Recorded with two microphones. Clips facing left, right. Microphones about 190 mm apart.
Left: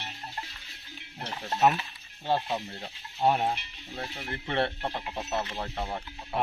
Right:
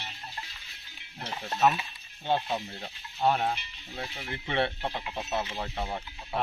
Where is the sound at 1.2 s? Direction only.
5° right (ahead or behind).